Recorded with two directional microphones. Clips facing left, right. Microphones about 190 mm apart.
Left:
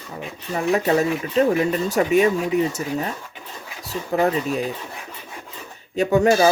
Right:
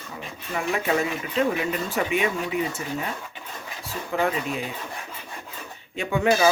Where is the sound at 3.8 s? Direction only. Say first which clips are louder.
Left 5 dB; 40° left (ahead or behind).